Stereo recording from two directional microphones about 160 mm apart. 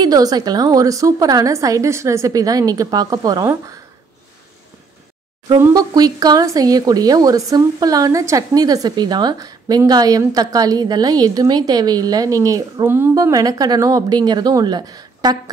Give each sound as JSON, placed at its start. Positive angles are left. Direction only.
{"t": 0.0, "sound": "a woman's voice", "side_deg": -25}
{"t": 5.6, "sound": "a woman's voice", "side_deg": -25}